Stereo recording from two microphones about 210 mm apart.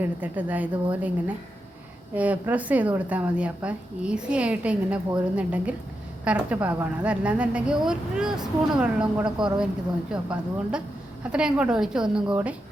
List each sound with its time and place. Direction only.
0.0 s a woman's voice: 10° right (ahead or behind)
2.1 s a woman's voice: 5° right (ahead or behind)